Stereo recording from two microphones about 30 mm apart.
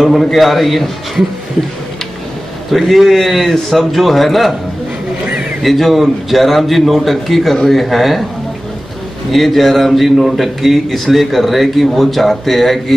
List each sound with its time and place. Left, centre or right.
0.0 s a man's voice: centre
2.7 s a man's voice: centre
5.6 s a man's voice: centre
9.3 s a man's voice: centre